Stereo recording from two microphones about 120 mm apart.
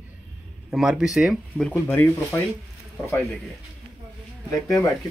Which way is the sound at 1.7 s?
15° left (ahead or behind).